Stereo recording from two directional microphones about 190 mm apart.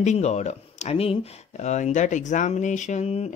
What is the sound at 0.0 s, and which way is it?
Speech, 35° left (ahead or behind).